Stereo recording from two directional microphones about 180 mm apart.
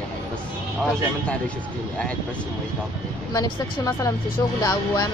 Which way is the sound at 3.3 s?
20° left (ahead or behind).